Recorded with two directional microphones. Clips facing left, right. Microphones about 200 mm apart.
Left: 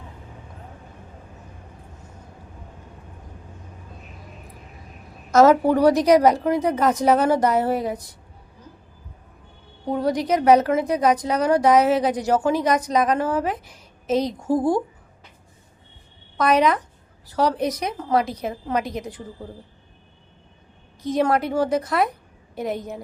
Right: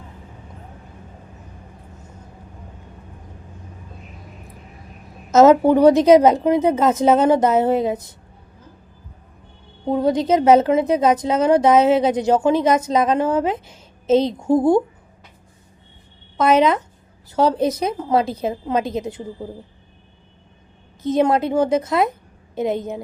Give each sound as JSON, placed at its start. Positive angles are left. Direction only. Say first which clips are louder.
{"t": 5.3, "sound": "a woman's voice", "louder": "right 3 dB", "side_deg": -25}
{"t": 9.8, "sound": "a woman's voice", "louder": "right 4 dB", "side_deg": -25}
{"t": 16.4, "sound": "a woman's voice", "louder": "right 3 dB", "side_deg": -25}
{"t": 21.0, "sound": "a woman's voice", "louder": "right 3 dB", "side_deg": -25}